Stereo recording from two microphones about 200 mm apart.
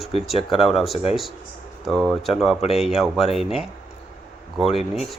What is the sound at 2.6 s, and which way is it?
Speech, 30° left (ahead or behind).